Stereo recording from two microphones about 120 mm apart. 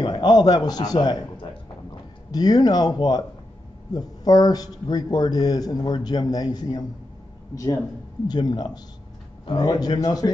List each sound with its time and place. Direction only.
0.0 s a man's voice: 40° left (ahead or behind)
8.3 s a man's voice: 35° left (ahead or behind)